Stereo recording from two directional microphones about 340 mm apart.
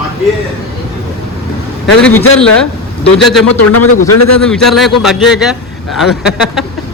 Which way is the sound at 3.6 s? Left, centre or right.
Left.